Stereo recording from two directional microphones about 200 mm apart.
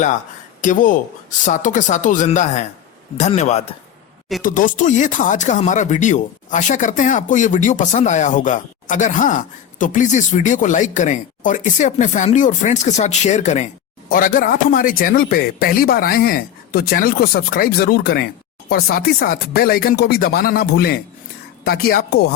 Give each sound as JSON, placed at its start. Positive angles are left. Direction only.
{"t": 0.6, "sound": "a man's voice", "side_deg": 40}